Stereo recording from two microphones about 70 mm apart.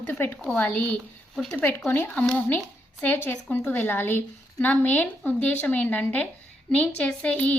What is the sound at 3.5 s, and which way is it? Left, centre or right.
A woman's voice, left.